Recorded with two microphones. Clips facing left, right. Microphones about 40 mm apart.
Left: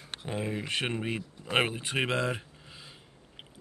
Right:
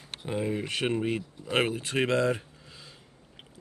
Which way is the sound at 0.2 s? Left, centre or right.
Centre.